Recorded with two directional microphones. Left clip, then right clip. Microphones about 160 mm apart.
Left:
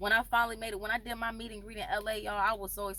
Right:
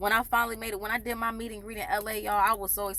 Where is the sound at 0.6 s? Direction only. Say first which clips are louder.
Right 3 dB; 20° left (ahead or behind).